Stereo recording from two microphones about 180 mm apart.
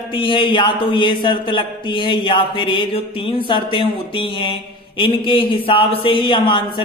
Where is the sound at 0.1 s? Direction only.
30° left (ahead or behind).